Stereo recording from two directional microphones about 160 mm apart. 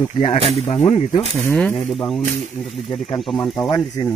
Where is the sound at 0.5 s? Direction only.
40° left (ahead or behind).